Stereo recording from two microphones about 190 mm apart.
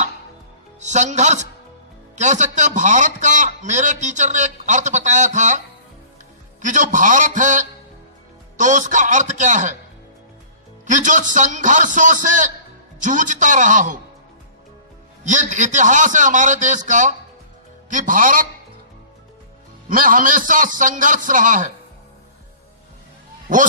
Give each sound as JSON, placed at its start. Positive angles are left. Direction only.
{"t": 0.7, "sound": "a man's voice", "side_deg": -40}
{"t": 6.6, "sound": "a man's voice", "side_deg": -40}
{"t": 10.9, "sound": "a man's voice", "side_deg": -40}
{"t": 15.2, "sound": "a man's voice", "side_deg": -40}
{"t": 19.9, "sound": "a man's voice", "side_deg": -45}
{"t": 23.5, "sound": "a man's voice", "side_deg": -45}